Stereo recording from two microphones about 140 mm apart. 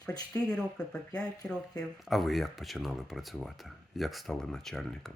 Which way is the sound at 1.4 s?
5° left (ahead or behind).